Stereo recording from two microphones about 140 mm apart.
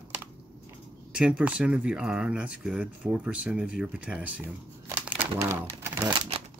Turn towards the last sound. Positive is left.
turn(degrees=-20)  # may be behind; listen again after turning